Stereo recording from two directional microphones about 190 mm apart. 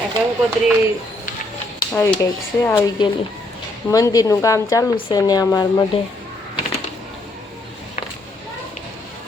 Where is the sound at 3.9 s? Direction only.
20° left (ahead or behind).